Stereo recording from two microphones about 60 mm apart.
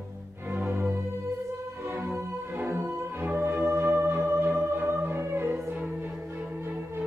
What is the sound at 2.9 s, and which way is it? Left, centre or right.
Music, right.